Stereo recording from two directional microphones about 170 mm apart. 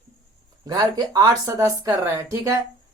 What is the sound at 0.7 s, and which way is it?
Speech, 20° right (ahead or behind).